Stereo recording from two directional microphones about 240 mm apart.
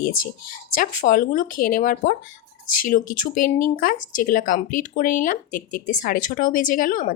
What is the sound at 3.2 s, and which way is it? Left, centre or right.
Speech, left.